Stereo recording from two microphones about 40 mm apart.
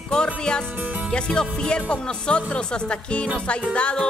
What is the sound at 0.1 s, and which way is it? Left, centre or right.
Speech, left.